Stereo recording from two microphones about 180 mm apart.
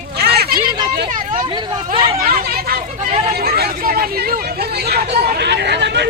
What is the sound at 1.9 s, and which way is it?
Speech, 55° right (ahead or behind).